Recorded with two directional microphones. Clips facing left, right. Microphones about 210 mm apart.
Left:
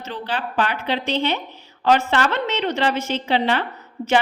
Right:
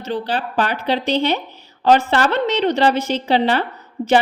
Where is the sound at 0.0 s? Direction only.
35° right (ahead or behind).